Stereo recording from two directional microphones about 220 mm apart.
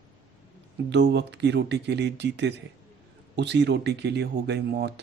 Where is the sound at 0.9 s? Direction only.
50° right (ahead or behind).